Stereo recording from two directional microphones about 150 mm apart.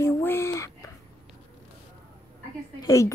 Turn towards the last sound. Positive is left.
turn(degrees=20)  # may be behind; listen again after turning